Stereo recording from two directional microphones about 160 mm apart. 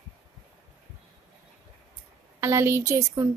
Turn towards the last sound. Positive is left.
turn(degrees=-15)  # may be behind; listen again after turning